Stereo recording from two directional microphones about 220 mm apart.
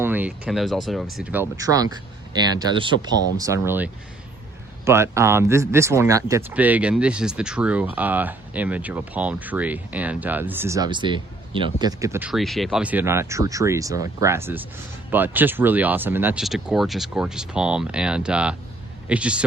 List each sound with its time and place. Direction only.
0.0 s speech: 10° right (ahead or behind)
4.9 s speech: 10° right (ahead or behind)
12.3 s speech: centre (ahead or behind)